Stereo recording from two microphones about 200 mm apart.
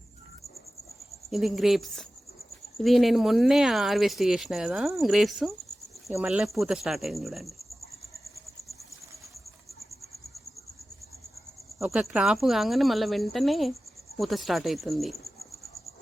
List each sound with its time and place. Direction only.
1.3 s speech: centre (ahead or behind)
11.8 s speech: centre (ahead or behind)